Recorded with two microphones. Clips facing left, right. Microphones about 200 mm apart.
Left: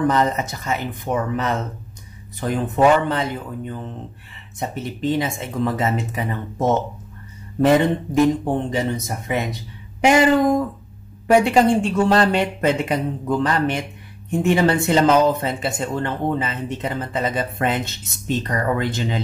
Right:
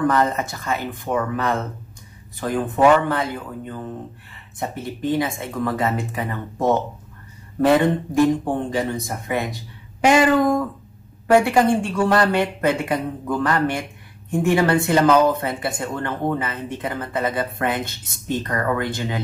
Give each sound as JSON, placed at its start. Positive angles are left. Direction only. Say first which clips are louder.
{"t": 0.0, "sound": "speech", "louder": "even", "side_deg": 20}